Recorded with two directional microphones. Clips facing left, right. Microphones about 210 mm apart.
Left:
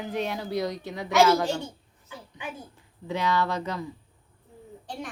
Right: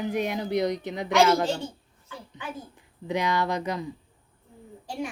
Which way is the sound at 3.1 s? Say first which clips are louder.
Even; 15° right (ahead or behind).